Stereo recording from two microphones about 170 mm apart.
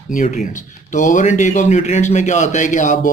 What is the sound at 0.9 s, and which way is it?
A man's voice, 45° left (ahead or behind).